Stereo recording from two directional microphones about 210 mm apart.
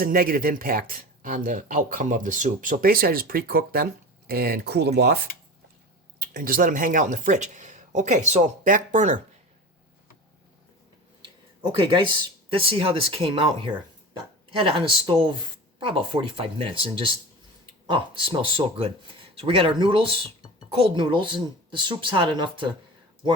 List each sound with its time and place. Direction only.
0.0 s speech: 45° right (ahead or behind)
11.7 s speech: 25° right (ahead or behind)